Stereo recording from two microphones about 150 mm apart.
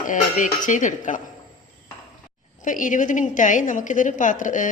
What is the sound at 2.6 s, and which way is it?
Speech, 60° left (ahead or behind).